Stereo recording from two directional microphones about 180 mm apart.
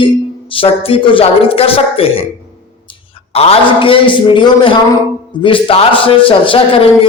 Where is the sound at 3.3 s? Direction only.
35° left (ahead or behind).